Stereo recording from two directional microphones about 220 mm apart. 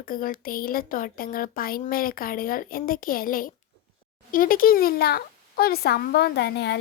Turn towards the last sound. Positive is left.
turn(degrees=50)  # may be behind; listen again after turning